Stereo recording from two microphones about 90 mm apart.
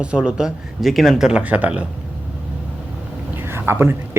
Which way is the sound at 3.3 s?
25° right (ahead or behind).